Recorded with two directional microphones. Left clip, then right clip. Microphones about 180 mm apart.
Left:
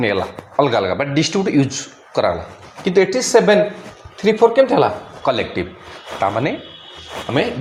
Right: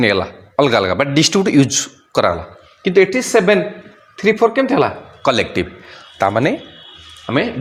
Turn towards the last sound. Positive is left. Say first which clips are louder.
# right 1 dB
turn(degrees=-30)  # may be behind; listen again after turning